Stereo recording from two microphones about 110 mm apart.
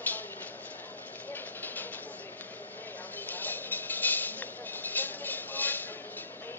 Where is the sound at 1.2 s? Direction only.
15° left (ahead or behind).